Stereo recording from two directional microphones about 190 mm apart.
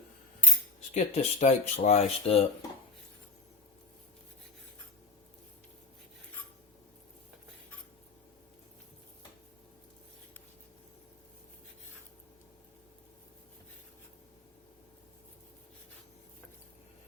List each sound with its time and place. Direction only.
0.9 s speech: 35° left (ahead or behind)